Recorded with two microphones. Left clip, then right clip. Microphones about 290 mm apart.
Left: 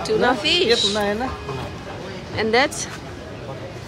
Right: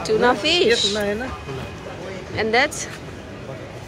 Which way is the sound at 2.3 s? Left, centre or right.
Centre.